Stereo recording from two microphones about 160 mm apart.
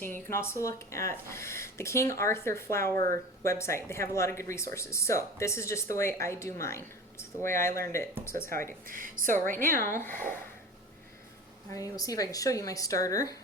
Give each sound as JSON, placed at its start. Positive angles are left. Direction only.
{"t": 0.0, "sound": "speech", "side_deg": 15}
{"t": 8.9, "sound": "a woman's voice", "side_deg": -55}
{"t": 9.7, "sound": "speech", "side_deg": 15}
{"t": 11.7, "sound": "a woman's voice", "side_deg": 20}